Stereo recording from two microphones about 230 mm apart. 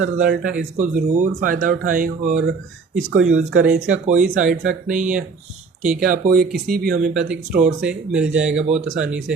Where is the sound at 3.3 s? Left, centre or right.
Right.